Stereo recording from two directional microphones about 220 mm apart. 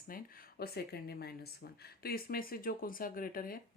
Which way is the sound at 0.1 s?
40° left (ahead or behind).